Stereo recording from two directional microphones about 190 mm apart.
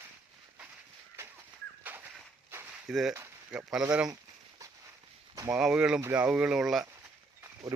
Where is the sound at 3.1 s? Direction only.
15° right (ahead or behind).